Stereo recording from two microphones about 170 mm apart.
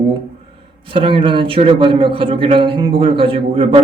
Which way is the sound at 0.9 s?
30° right (ahead or behind).